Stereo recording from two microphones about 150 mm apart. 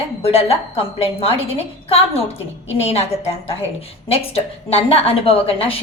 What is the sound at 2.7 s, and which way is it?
Speech, 40° left (ahead or behind).